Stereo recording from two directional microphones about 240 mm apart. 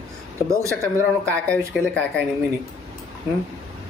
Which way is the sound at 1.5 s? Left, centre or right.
Centre.